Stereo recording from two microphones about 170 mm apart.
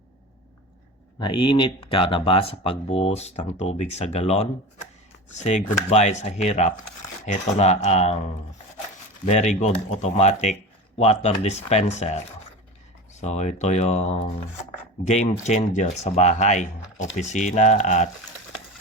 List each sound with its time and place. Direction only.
1.2 s speech: 30° left (ahead or behind)
9.2 s speech: 40° left (ahead or behind)